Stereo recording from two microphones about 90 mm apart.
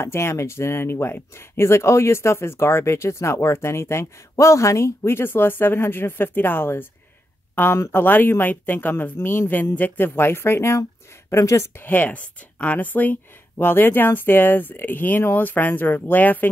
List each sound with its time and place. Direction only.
0.0 s speech: 30° left (ahead or behind)